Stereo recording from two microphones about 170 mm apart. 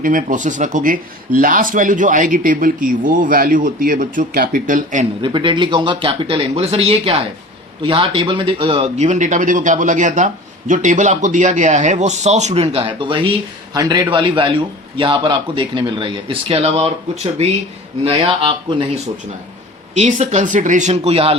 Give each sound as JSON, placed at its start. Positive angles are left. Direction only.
{"t": 0.0, "sound": "speech", "side_deg": -55}
{"t": 5.2, "sound": "a man's voice", "side_deg": -30}
{"t": 18.0, "sound": "speech", "side_deg": -35}
{"t": 20.0, "sound": "speech", "side_deg": -40}